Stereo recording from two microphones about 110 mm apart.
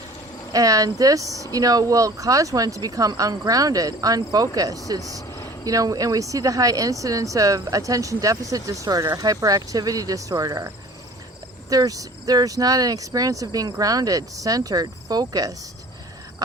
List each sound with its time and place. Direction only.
0.5 s speech: 35° right (ahead or behind)
11.7 s speech: 35° right (ahead or behind)